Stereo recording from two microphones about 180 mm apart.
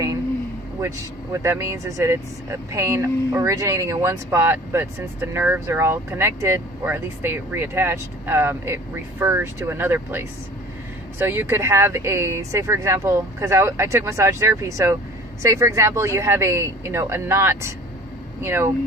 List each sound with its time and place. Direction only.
0.8 s speech: 15° right (ahead or behind)